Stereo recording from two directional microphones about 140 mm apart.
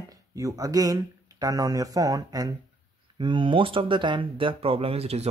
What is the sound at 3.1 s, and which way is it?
Speech, 35° right (ahead or behind).